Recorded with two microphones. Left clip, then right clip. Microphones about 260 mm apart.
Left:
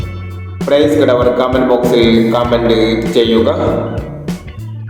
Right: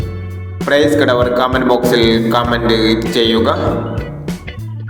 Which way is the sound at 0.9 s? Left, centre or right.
Right.